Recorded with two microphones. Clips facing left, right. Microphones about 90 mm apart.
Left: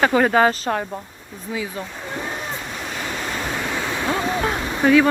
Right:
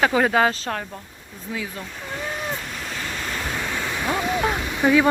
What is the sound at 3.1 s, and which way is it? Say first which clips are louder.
Waterfall: left 3 dB; 15° left (ahead or behind).